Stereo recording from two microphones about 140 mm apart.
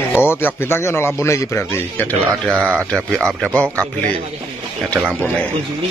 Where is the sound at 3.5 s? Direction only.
10° left (ahead or behind).